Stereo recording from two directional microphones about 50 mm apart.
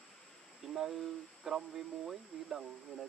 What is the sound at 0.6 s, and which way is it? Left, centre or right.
Speech, centre.